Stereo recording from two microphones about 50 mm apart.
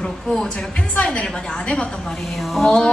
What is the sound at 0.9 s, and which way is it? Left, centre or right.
Speech, left.